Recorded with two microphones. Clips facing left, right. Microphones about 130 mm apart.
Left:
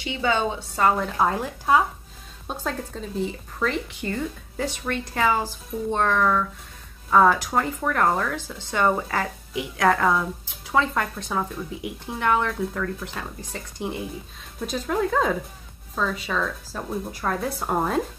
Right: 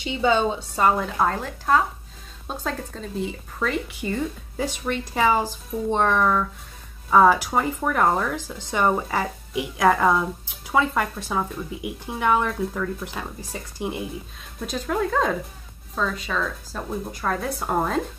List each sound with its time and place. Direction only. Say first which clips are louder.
0.0 s a woman's voice: right 3 dB; 25° right (ahead or behind)
0.9 s a woman's voice: even; 5° left (ahead or behind); by 14.0 s 10° right (ahead or behind)
14.7 s a woman's voice: even; centre (ahead or behind)